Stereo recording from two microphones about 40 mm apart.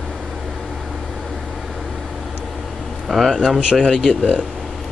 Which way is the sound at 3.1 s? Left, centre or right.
Centre.